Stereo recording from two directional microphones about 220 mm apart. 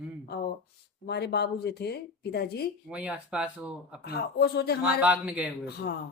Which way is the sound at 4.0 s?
45° left (ahead or behind).